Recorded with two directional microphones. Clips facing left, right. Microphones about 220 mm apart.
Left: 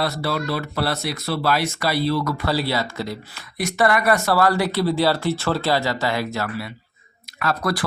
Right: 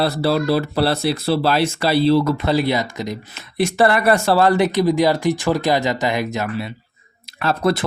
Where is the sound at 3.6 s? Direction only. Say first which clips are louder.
Right 4 dB; 30° right (ahead or behind).